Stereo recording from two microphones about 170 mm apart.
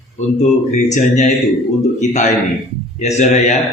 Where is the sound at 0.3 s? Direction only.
45° left (ahead or behind).